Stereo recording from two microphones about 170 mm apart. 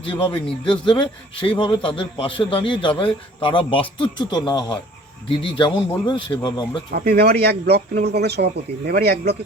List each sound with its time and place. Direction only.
0.0 s a man's voice: 30° left (ahead or behind)
6.9 s speech: 70° right (ahead or behind)